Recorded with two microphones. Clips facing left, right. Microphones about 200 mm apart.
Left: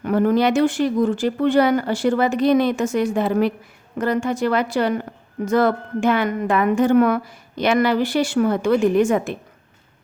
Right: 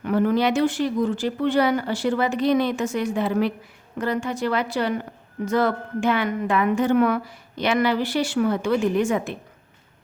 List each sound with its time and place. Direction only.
0.0 s a woman's voice: 45° left (ahead or behind)